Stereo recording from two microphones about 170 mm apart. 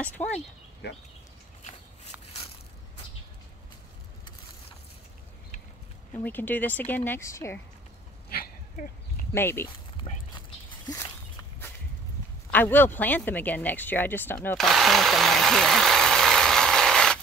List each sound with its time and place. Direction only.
0.2 s a sound: 10° left (ahead or behind)
0.8 s speech: 75° left (ahead or behind)
6.1 s speech: 10° left (ahead or behind)
8.3 s a sound: 60° left (ahead or behind)
9.3 s speech: 15° left (ahead or behind)
12.4 s speech: 10° left (ahead or behind)
14.6 s vehicle: centre (ahead or behind)